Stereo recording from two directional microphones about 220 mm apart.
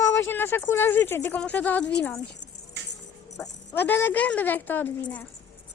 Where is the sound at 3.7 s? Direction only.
10° left (ahead or behind).